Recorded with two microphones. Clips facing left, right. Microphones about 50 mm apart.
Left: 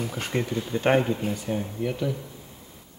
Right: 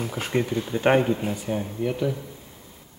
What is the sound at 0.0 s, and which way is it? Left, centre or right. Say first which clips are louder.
Speech: right 3 dB; centre.